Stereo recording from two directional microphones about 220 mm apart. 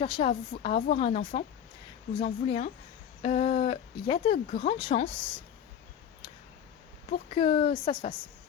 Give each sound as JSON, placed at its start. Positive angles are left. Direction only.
{"t": 0.0, "sound": "speech", "side_deg": 25}
{"t": 7.1, "sound": "speech", "side_deg": 25}